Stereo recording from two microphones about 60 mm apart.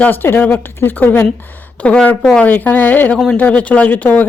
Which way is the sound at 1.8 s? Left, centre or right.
Left.